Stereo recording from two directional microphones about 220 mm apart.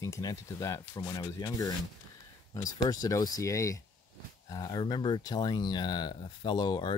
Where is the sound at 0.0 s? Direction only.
15° left (ahead or behind).